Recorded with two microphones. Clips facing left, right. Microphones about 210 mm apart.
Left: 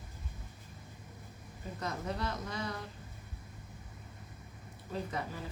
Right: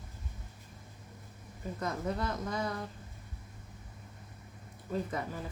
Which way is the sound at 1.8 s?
50° right (ahead or behind).